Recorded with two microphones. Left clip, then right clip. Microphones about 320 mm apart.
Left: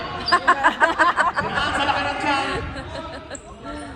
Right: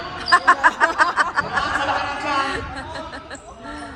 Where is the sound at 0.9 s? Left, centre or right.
Centre.